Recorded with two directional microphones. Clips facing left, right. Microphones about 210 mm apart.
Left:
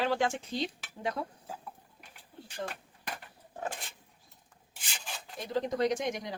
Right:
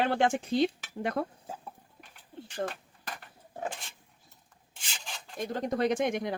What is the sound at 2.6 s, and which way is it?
Speech, 50° right (ahead or behind).